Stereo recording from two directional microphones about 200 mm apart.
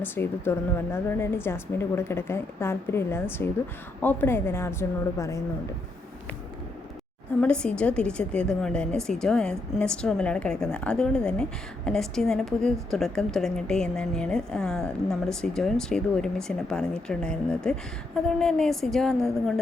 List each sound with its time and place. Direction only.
0.0 s a woman's voice: 10° left (ahead or behind)
7.4 s a woman's voice: 5° left (ahead or behind)